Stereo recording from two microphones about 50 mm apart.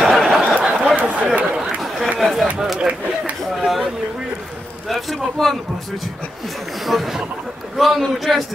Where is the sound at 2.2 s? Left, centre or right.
Centre.